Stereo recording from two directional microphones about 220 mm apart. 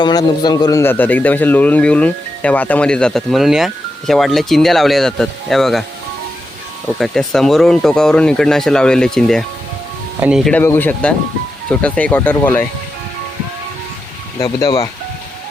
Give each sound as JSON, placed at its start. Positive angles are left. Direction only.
{"t": 0.0, "sound": "a man's voice", "side_deg": 20}
{"t": 7.0, "sound": "a man's voice", "side_deg": 0}
{"t": 14.3, "sound": "speech", "side_deg": 15}